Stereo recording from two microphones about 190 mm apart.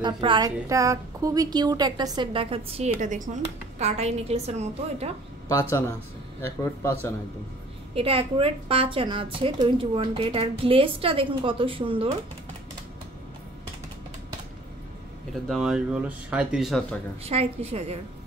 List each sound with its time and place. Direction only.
0.0 s a woman's voice: 25° right (ahead or behind)
3.0 s a woman's voice: 40° right (ahead or behind)
5.5 s speech: 15° left (ahead or behind)
7.9 s a woman's voice: 30° right (ahead or behind)
15.4 s speech: centre (ahead or behind)
17.2 s a woman's voice: 30° right (ahead or behind)